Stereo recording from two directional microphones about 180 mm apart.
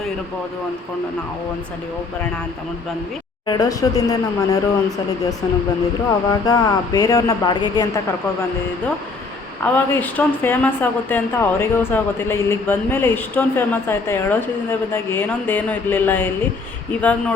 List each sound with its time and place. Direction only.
3.4 s speech: 20° left (ahead or behind)
6.4 s speech: 20° left (ahead or behind)
9.6 s speech: 10° left (ahead or behind)